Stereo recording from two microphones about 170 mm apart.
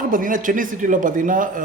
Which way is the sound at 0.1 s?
50° right (ahead or behind).